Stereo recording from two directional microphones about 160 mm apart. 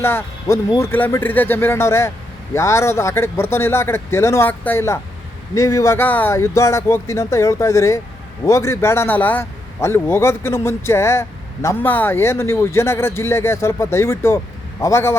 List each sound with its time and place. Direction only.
0.0 s a man's voice: 15° left (ahead or behind)